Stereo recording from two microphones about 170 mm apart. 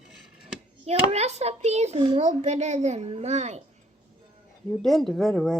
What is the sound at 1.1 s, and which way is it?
A child's voice, 40° right (ahead or behind).